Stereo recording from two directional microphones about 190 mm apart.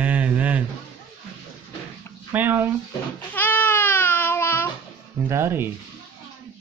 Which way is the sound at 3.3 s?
10° left (ahead or behind).